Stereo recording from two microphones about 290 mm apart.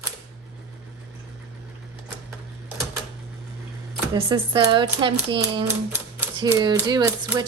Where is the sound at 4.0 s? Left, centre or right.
Centre.